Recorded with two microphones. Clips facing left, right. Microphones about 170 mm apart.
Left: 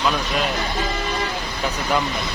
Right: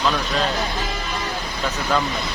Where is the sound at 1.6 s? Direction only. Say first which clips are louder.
Even; 10° left (ahead or behind).